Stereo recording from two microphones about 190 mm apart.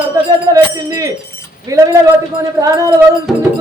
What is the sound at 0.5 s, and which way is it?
Speech, 20° right (ahead or behind).